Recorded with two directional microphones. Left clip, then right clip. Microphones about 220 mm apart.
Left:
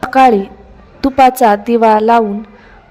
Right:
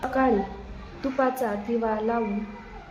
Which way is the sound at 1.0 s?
45° left (ahead or behind).